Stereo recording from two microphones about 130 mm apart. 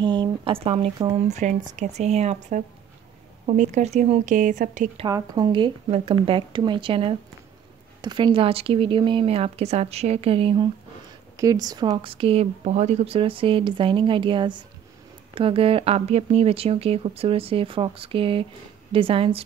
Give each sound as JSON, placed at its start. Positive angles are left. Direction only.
{"t": 0.0, "sound": "speech", "side_deg": -35}
{"t": 5.0, "sound": "speech", "side_deg": -30}
{"t": 5.9, "sound": "speech", "side_deg": -45}
{"t": 11.3, "sound": "speech", "side_deg": -25}